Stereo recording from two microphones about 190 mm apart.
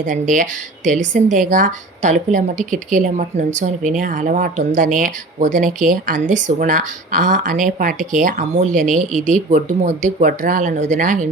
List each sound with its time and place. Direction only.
0.1 s speech: 40° right (ahead or behind)